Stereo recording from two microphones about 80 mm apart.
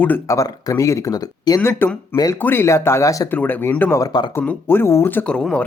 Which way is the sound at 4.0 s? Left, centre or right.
Left.